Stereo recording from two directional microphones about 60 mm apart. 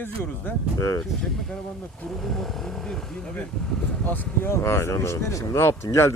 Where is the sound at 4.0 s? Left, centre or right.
Left.